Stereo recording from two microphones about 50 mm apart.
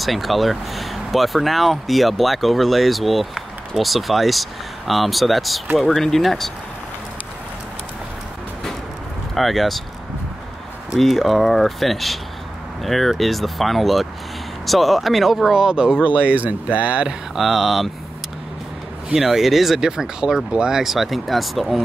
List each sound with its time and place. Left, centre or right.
0.0 s speech: centre
9.3 s speech: centre
11.0 s speech: centre
16.1 s speech: right
17.4 s speech: centre
19.1 s speech: centre
19.8 s speech: centre
20.8 s speech: centre